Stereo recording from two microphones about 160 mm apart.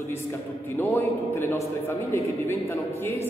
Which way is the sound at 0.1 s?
15° left (ahead or behind).